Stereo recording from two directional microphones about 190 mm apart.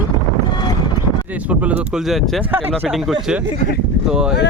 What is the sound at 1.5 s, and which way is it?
Speech, 5° right (ahead or behind).